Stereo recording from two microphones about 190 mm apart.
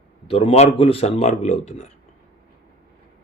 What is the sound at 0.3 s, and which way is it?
Speech, 30° left (ahead or behind).